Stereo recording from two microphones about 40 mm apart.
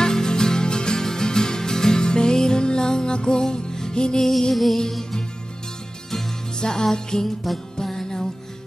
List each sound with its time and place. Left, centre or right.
0.0 s music: centre
4.2 s music: centre
6.6 s music: centre